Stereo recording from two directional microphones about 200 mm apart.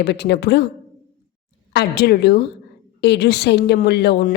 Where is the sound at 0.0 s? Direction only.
55° left (ahead or behind).